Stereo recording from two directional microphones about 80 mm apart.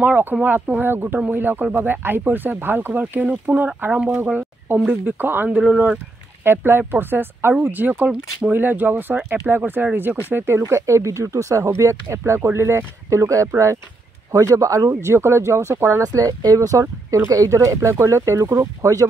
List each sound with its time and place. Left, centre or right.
0.0 s speech: right
4.3 s a sound: right
4.8 s speech: right
5.6 s speech: centre
6.4 s speech: right
16.0 s speech: right